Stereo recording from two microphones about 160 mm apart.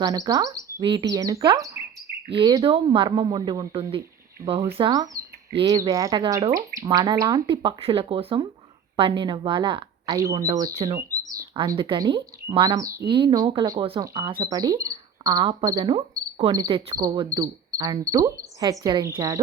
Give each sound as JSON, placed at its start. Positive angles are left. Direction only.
{"t": 0.0, "sound": "speech", "side_deg": -25}
{"t": 17.3, "sound": "insect", "side_deg": -20}
{"t": 18.6, "sound": "speech", "side_deg": -25}